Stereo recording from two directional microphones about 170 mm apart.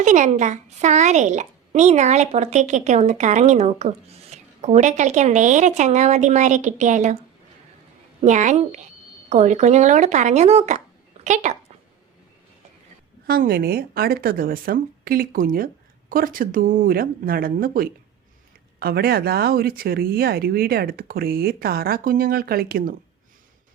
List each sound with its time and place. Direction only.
0.0 s a woman's voice: 45° right (ahead or behind)
8.2 s a woman's voice: 45° right (ahead or behind)
13.2 s speech: 65° right (ahead or behind)